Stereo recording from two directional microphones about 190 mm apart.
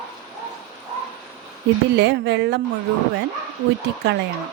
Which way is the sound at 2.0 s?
65° right (ahead or behind).